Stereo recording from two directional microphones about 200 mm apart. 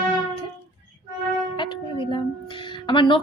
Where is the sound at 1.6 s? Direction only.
25° left (ahead or behind).